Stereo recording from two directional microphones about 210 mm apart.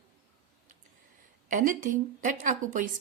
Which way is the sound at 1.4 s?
40° right (ahead or behind).